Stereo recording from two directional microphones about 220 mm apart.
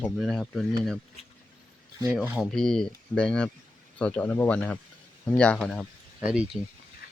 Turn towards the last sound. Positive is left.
turn(degrees=-5)  # may be behind; listen again after turning